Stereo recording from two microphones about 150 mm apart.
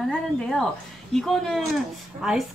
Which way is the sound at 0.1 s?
5° left (ahead or behind).